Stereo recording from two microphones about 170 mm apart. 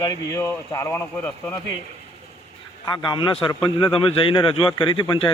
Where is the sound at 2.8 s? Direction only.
25° left (ahead or behind).